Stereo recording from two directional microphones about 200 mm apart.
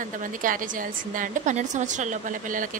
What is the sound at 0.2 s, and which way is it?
A woman's voice, 40° right (ahead or behind).